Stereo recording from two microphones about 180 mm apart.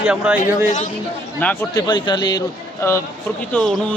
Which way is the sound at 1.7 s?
20° left (ahead or behind).